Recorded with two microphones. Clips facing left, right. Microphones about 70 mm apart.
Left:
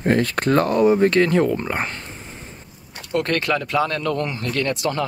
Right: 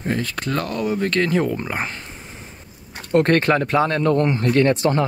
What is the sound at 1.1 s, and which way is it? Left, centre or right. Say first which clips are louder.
Speech: left 3 dB; centre.